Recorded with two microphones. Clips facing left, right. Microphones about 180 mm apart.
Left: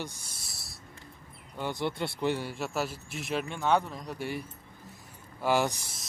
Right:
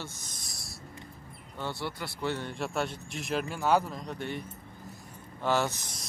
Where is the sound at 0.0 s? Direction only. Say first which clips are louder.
Left 3 dB; 10° left (ahead or behind).